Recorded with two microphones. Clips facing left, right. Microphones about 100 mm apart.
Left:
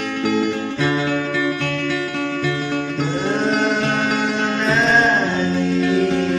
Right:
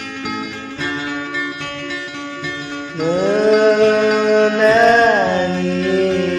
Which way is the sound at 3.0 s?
60° right (ahead or behind).